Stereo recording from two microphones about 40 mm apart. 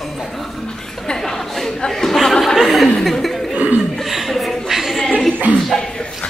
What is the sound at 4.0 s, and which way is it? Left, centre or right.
Chuckle, centre.